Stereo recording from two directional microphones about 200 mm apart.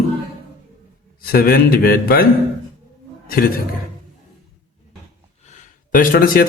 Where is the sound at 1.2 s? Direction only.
50° left (ahead or behind).